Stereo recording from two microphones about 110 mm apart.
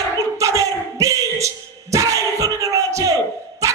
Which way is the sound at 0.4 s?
30° right (ahead or behind).